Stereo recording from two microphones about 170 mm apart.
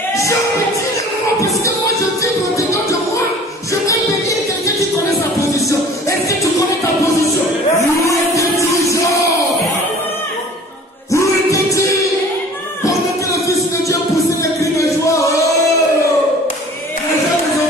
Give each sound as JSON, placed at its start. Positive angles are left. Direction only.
{"t": 3.8, "sound": "music", "side_deg": 20}
{"t": 8.1, "sound": "music", "side_deg": 20}
{"t": 11.1, "sound": "music", "side_deg": 20}
{"t": 14.4, "sound": "music", "side_deg": 20}